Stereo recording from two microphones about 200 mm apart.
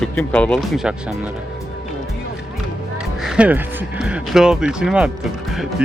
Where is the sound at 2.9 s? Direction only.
5° right (ahead or behind).